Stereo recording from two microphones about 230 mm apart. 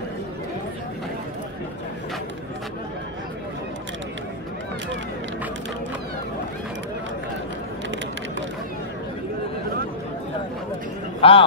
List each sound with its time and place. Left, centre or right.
11.1 s a man's voice: left